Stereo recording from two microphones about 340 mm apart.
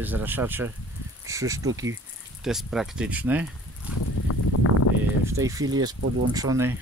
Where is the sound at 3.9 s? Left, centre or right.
Left.